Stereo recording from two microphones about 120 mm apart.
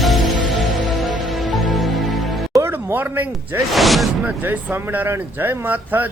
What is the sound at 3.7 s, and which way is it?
Speech, centre (ahead or behind).